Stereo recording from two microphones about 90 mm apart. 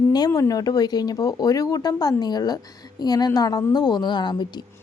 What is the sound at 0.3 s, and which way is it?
Speech, 40° left (ahead or behind).